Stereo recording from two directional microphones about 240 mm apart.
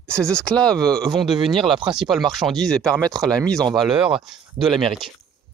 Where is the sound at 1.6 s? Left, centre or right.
Centre.